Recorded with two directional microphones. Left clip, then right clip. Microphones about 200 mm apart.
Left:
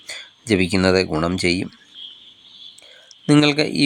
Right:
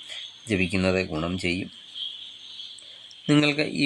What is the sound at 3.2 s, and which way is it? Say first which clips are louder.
Speech: left 6 dB; 20° left (ahead or behind).